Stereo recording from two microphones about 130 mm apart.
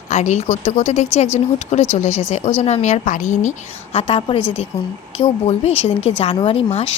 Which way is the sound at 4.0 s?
40° left (ahead or behind).